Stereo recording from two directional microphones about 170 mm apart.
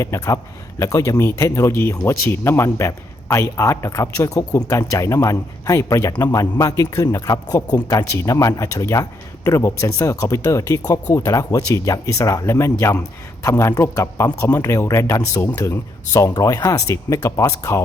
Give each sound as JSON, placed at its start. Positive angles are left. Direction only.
{"t": 0.0, "sound": "a man's voice", "side_deg": 20}